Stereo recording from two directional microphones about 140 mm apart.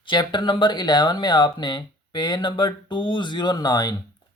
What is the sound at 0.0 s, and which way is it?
Speech, 35° left (ahead or behind).